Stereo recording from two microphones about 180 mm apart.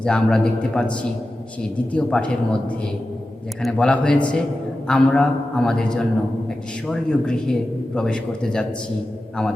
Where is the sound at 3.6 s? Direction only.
5° left (ahead or behind).